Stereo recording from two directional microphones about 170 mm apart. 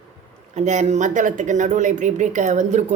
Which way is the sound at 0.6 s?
45° right (ahead or behind).